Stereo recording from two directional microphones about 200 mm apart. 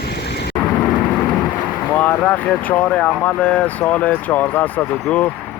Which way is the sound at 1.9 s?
10° left (ahead or behind).